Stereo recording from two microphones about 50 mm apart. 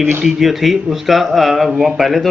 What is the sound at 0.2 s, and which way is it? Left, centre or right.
Speech, centre.